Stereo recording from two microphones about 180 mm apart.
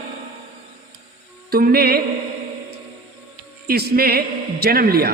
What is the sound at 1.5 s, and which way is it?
Speech, 60° right (ahead or behind).